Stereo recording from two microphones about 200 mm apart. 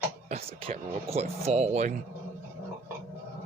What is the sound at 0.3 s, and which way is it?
Speech, 35° right (ahead or behind).